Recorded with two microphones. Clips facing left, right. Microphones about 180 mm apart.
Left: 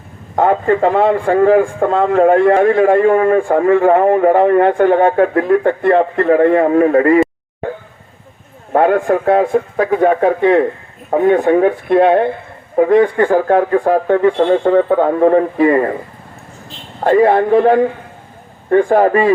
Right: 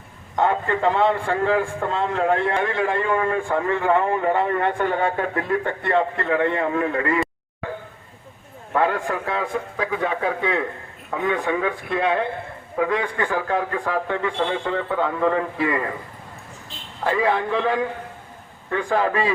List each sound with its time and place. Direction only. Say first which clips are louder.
0.3 s a man's voice: left 8 dB; 50° left (ahead or behind)
1.4 s a man's voice: left 11 dB; 50° left (ahead or behind)
8.7 s a man's voice: left 10 dB; 50° left (ahead or behind)
17.0 s a man's voice: left 11 dB; 50° left (ahead or behind)